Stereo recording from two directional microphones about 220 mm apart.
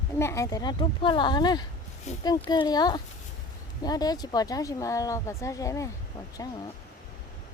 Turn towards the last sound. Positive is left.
turn(degrees=15)  # may be behind; listen again after turning